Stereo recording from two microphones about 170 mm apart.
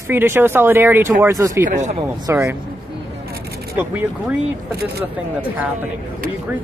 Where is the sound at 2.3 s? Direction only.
15° right (ahead or behind).